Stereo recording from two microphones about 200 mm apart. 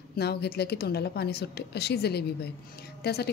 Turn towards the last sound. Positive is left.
turn(degrees=55)  # may be behind; listen again after turning